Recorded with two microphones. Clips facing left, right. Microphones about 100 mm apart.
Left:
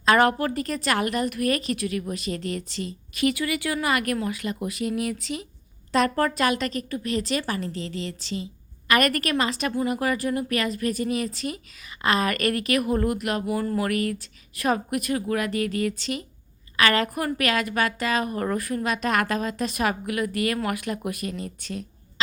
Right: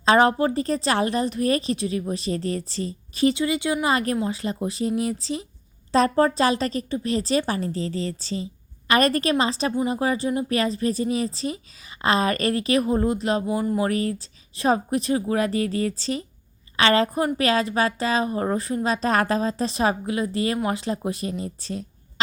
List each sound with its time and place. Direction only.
0.0 s a woman's voice: 25° right (ahead or behind)